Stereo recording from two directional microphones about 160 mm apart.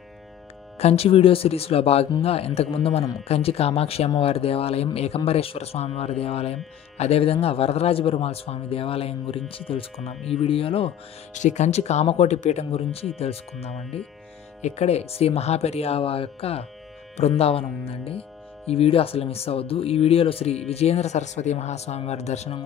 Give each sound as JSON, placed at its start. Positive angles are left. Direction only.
{"t": 0.7, "sound": "speech", "side_deg": 40}
{"t": 11.3, "sound": "speech", "side_deg": 50}